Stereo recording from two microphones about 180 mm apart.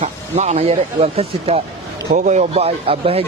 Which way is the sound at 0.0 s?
40° right (ahead or behind).